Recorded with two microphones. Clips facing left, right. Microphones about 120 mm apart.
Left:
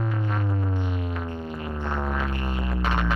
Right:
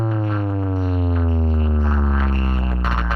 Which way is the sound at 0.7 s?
45° right (ahead or behind).